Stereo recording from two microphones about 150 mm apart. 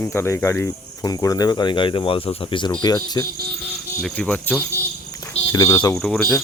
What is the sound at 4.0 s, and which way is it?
Speech, 10° left (ahead or behind).